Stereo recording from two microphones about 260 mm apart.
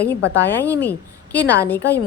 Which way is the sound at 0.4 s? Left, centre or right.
Centre.